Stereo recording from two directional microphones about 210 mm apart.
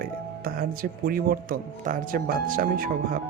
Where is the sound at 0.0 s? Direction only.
45° right (ahead or behind).